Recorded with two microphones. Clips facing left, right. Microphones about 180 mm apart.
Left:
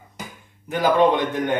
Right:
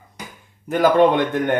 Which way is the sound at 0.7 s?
60° right (ahead or behind).